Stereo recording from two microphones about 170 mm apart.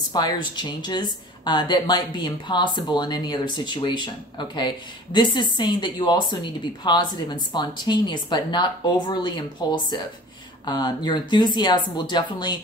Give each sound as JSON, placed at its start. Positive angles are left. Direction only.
{"t": 0.1, "sound": "a woman's voice", "side_deg": 25}